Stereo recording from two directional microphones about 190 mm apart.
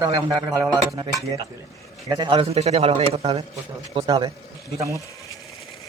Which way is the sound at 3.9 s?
20° right (ahead or behind).